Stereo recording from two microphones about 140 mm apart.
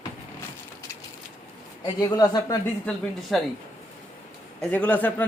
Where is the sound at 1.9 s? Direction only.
25° left (ahead or behind).